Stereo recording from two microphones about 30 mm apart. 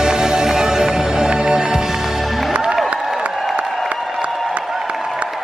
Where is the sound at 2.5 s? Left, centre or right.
Right.